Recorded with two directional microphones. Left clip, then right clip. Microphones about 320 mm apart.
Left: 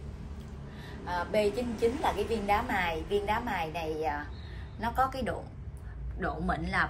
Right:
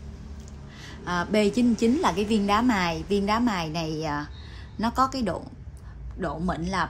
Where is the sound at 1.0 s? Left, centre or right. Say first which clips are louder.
Right 4 dB; right.